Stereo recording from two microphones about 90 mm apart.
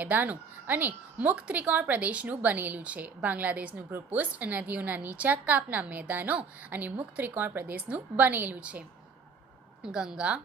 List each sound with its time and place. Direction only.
0.0 s a woman's voice: 20° right (ahead or behind)
9.8 s speech: 10° right (ahead or behind)